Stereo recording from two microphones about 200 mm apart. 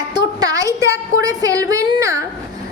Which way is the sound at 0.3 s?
20° right (ahead or behind).